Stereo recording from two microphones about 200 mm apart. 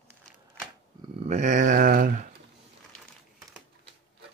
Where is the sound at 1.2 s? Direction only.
35° right (ahead or behind).